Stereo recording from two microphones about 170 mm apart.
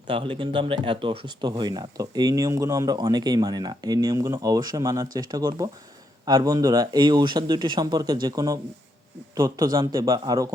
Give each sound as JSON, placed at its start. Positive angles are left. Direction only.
{"t": 0.1, "sound": "speech", "side_deg": -30}